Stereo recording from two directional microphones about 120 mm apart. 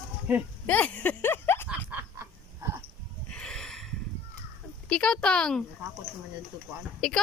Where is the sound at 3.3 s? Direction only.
5° left (ahead or behind).